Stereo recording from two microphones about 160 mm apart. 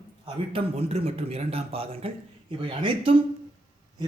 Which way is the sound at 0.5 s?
40° right (ahead or behind).